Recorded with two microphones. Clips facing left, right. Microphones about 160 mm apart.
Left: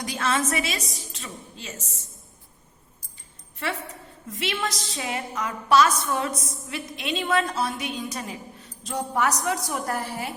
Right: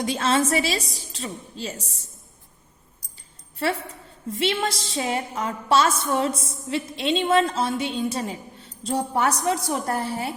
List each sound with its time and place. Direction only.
0.0 s a woman's voice: 25° right (ahead or behind)
4.3 s a woman's voice: 30° right (ahead or behind)